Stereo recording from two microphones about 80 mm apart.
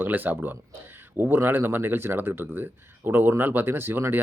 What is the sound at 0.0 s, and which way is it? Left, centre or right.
Speech, right.